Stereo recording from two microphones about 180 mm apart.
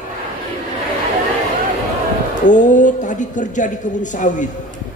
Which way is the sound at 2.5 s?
45° left (ahead or behind).